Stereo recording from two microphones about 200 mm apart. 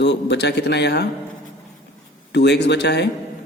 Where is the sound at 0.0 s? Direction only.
60° left (ahead or behind).